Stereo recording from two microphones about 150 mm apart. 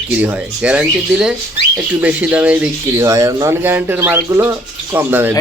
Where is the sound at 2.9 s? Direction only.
20° right (ahead or behind).